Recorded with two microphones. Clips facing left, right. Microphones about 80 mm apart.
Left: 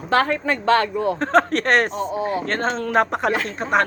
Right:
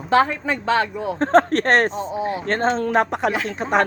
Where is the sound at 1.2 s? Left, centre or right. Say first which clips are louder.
Right 4 dB; right.